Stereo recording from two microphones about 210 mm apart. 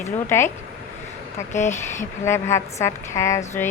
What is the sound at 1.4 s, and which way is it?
Speech, 35° left (ahead or behind).